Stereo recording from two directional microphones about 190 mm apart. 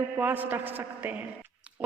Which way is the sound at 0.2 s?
10° right (ahead or behind).